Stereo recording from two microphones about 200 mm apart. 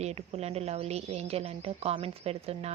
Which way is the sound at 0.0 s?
30° right (ahead or behind).